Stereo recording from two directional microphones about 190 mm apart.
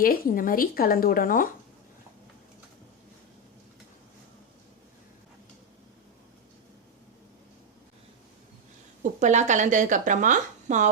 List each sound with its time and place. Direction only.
0.0 s speech: 50° left (ahead or behind)
9.2 s speech: 40° right (ahead or behind)